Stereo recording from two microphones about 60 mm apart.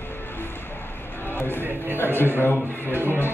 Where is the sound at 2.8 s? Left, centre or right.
Right.